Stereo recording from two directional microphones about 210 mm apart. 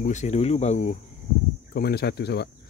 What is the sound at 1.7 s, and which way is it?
Speech, 50° left (ahead or behind).